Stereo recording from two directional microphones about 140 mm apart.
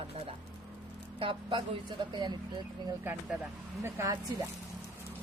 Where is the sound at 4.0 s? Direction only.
20° right (ahead or behind).